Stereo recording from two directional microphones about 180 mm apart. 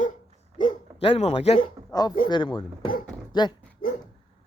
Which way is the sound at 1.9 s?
20° left (ahead or behind).